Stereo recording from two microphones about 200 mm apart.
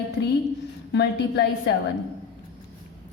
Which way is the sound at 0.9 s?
55° left (ahead or behind).